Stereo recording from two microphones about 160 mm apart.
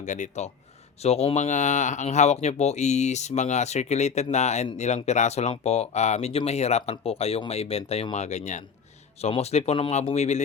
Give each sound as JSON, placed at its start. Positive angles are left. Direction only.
{"t": 0.0, "sound": "speech", "side_deg": 50}